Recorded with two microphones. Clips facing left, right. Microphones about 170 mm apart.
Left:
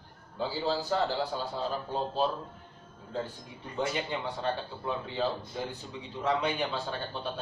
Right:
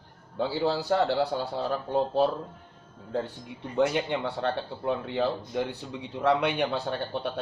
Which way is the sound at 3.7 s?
65° right (ahead or behind).